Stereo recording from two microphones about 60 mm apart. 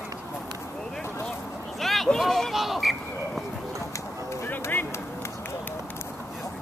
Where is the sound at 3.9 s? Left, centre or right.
Left.